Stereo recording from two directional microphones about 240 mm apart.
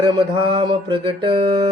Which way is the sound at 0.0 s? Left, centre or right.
Centre.